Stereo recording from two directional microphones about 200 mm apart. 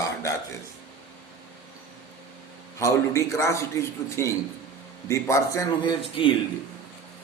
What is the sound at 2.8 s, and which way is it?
A man's voice, 15° left (ahead or behind).